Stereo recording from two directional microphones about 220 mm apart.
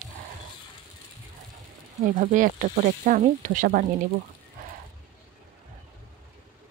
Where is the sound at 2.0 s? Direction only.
35° right (ahead or behind).